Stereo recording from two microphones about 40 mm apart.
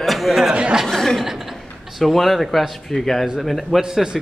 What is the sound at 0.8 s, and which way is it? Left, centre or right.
A man's voice, centre.